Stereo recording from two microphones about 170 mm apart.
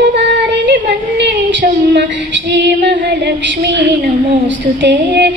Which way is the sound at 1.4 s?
90° right.